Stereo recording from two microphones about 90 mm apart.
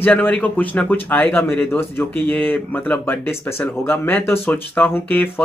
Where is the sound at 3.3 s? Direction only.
25° left (ahead or behind).